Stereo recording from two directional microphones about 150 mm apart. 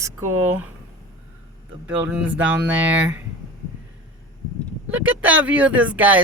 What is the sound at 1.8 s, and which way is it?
Speech, 10° right (ahead or behind).